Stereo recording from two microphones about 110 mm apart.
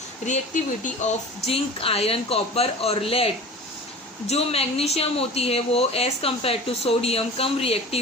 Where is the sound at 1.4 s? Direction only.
60° left (ahead or behind).